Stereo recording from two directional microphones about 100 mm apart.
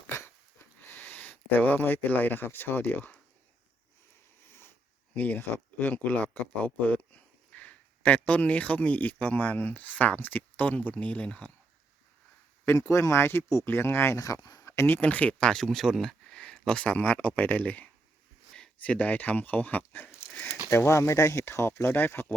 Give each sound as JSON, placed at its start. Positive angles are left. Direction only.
{"t": 0.8, "sound": "speech", "side_deg": 20}
{"t": 4.4, "sound": "a sound", "side_deg": 25}
{"t": 5.1, "sound": "speech", "side_deg": 15}
{"t": 12.9, "sound": "speech", "side_deg": 30}